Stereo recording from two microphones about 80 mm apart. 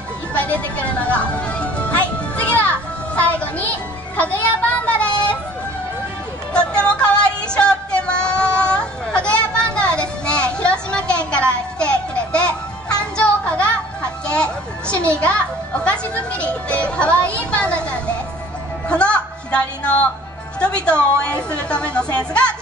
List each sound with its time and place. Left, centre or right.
0.3 s speech: centre
3.2 s music: centre
4.2 s children playing: centre
6.5 s music: centre
13.2 s a sound: centre
15.1 s music: centre
17.5 s children playing: centre
18.9 s a sound: centre
20.6 s a woman's voice: centre